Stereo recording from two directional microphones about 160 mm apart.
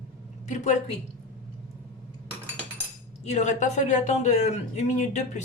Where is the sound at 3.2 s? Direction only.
45° left (ahead or behind).